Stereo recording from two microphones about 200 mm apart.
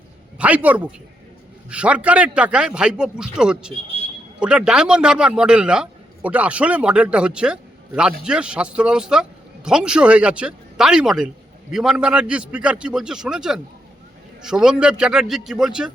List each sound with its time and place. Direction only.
0.3 s a man's voice: 5° right (ahead or behind)